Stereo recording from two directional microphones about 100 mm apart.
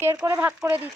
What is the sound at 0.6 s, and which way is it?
Speech, 20° right (ahead or behind).